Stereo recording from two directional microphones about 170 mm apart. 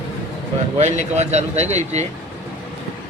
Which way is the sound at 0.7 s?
40° right (ahead or behind).